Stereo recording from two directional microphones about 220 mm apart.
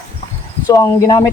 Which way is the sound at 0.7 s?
15° left (ahead or behind).